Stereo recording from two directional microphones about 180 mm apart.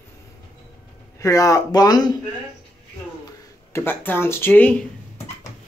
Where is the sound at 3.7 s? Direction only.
10° left (ahead or behind).